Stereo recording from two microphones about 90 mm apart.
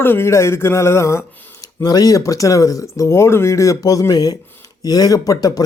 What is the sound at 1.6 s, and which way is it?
Speech, 45° left (ahead or behind).